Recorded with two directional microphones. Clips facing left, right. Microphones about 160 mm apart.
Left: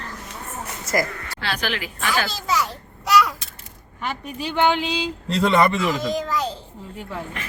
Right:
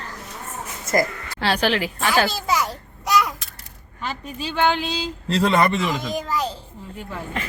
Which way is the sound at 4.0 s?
15° left (ahead or behind).